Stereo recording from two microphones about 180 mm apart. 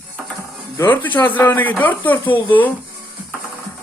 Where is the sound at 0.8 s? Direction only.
10° left (ahead or behind).